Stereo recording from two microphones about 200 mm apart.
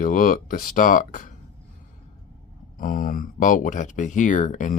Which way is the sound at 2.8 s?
40° left (ahead or behind).